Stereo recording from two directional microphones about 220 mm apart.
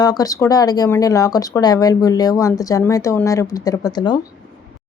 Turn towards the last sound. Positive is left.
turn(degrees=20)  # may be behind; listen again after turning